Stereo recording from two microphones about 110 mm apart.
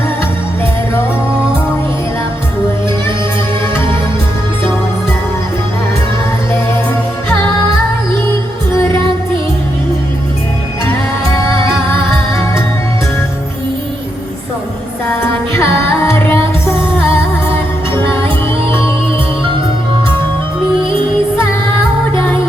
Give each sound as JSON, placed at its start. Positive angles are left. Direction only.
{"t": 8.7, "sound": "music", "side_deg": 20}
{"t": 15.2, "sound": "music", "side_deg": 25}